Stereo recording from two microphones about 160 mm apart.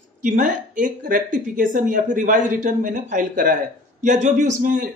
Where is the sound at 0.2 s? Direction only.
55° right (ahead or behind).